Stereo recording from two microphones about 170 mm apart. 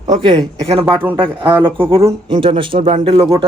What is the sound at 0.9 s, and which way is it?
Speech, 10° right (ahead or behind).